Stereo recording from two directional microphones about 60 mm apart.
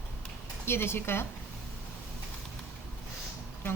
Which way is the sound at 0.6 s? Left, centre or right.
Left.